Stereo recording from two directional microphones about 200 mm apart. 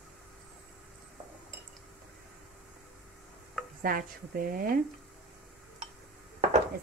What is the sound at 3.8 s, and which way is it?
A woman's voice, 45° right (ahead or behind).